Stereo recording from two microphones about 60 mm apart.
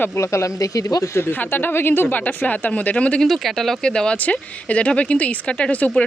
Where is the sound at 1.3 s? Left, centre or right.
Left.